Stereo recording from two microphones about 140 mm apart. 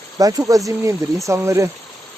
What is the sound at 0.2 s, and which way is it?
Speech, 25° right (ahead or behind).